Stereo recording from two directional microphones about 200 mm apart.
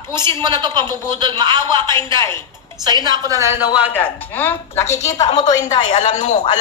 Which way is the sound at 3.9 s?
10° left (ahead or behind).